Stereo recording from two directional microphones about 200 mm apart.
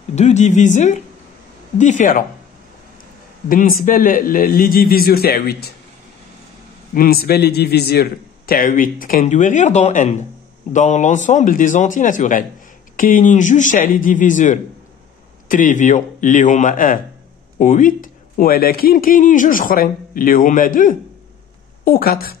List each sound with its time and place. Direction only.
0.1 s a man's voice: 35° left (ahead or behind)
3.4 s a man's voice: 45° left (ahead or behind)
6.9 s a man's voice: 50° left (ahead or behind)